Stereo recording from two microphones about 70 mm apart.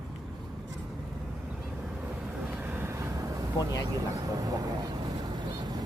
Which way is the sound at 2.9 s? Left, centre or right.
Right.